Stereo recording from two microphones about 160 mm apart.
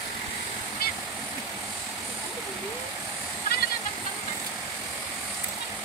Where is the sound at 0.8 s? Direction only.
65° left (ahead or behind).